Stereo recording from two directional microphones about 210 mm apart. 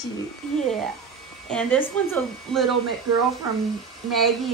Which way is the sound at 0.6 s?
Centre (ahead or behind).